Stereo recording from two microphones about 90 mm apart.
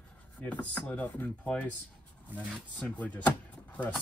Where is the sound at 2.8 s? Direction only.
15° left (ahead or behind).